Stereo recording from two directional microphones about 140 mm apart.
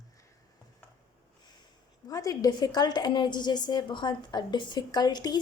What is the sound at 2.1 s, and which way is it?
A woman's voice, 25° left (ahead or behind).